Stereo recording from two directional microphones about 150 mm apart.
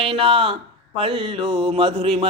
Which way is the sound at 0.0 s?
35° right (ahead or behind).